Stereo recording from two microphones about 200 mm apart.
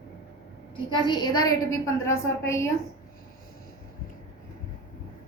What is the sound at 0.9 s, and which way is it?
A woman's voice, 20° left (ahead or behind).